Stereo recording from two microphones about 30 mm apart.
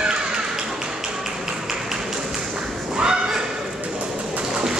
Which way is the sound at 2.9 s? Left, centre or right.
Right.